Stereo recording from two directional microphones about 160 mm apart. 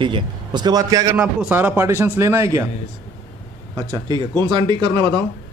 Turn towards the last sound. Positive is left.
turn(degrees=-25)  # may be behind; listen again after turning